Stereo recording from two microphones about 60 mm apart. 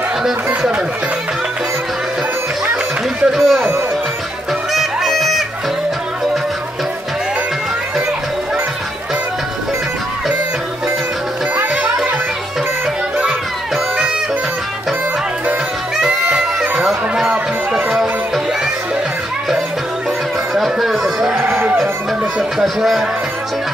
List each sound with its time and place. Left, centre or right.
3.3 s speech: centre
4.7 s music: centre
11.5 s music: right
16.1 s music: centre
20.5 s a sound: centre
22.6 s speech: centre